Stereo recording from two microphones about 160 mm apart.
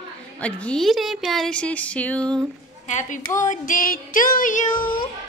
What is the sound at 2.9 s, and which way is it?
Music, 50° left (ahead or behind).